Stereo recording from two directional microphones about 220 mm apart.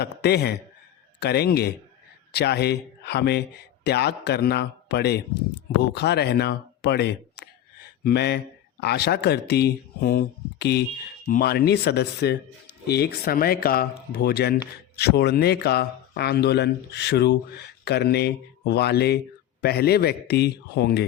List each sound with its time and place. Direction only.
0.0 s speech: 45° left (ahead or behind)